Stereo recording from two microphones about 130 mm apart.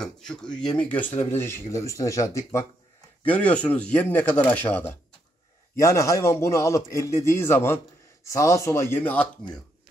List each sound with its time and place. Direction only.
0.0 s a man's voice: 5° left (ahead or behind); by 2.6 s 25° left (ahead or behind)
3.3 s a man's voice: 10° left (ahead or behind)